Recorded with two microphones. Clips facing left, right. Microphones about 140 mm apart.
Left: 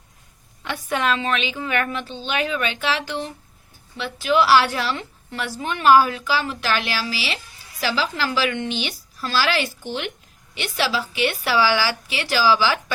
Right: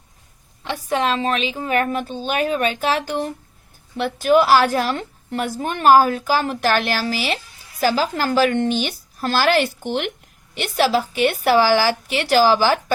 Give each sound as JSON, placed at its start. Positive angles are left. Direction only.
{"t": 0.6, "sound": "a woman's voice", "side_deg": -30}